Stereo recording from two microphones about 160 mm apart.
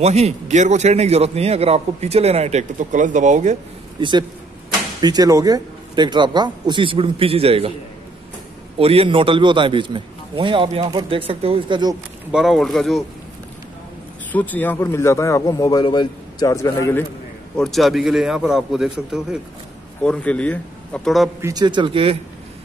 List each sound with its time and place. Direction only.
0.0 s a man's voice: 40° right (ahead or behind)
4.0 s a man's voice: 30° right (ahead or behind)
8.7 s a man's voice: 35° right (ahead or behind)
12.3 s a man's voice: centre (ahead or behind)
14.3 s a man's voice: 10° left (ahead or behind)
17.6 s a man's voice: centre (ahead or behind)
21.4 s a man's voice: 20° right (ahead or behind)